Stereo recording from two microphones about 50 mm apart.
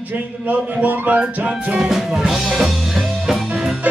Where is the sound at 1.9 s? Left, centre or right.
Centre.